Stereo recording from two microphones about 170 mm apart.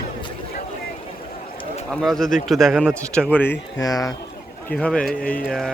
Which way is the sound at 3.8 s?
20° left (ahead or behind).